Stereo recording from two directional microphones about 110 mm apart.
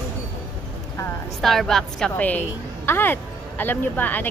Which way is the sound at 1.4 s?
Centre (ahead or behind).